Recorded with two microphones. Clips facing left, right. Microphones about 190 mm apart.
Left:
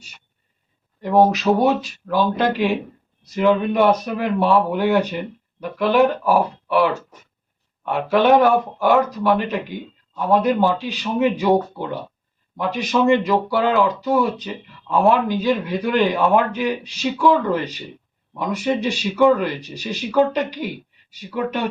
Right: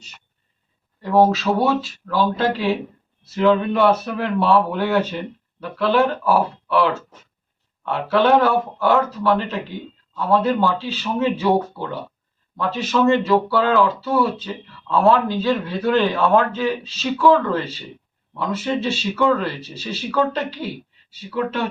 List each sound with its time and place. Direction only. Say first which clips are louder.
1.0 s speech: left 1 dB; 15° left (ahead or behind)